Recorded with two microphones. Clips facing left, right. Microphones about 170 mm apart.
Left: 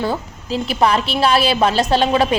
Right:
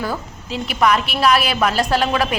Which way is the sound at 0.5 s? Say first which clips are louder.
Left 1 dB; 30° left (ahead or behind).